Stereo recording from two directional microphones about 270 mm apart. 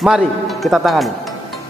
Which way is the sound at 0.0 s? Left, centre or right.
Centre.